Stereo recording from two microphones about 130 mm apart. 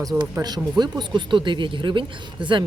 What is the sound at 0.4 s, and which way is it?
Speech, 35° right (ahead or behind).